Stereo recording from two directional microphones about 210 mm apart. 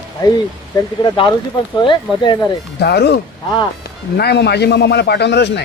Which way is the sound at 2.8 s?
50° left (ahead or behind).